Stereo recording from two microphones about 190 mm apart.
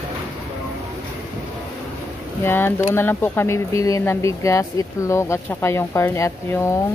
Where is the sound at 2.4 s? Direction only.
10° left (ahead or behind).